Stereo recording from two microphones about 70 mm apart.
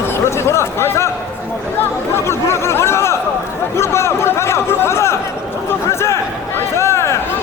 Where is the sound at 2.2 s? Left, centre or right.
Left.